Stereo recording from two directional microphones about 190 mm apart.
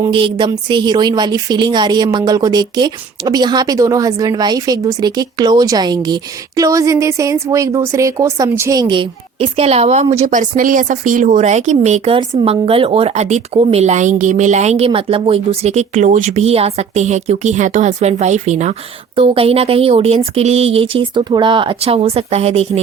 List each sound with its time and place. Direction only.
0.0 s a woman's voice: 25° right (ahead or behind)